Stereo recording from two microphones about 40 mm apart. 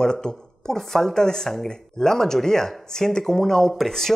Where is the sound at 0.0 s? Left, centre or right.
Centre.